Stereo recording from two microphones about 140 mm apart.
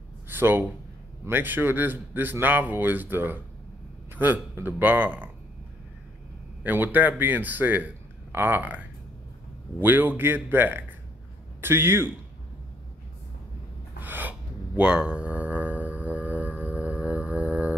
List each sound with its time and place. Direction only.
0.3 s a man's voice: 15° right (ahead or behind)
6.6 s speech: 15° right (ahead or behind)
13.9 s gasp: 15° right (ahead or behind)
14.8 s a sound: 5° right (ahead or behind)